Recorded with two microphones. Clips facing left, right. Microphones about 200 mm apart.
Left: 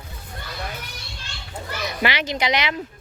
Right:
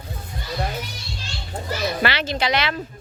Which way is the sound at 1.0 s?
55° left (ahead or behind).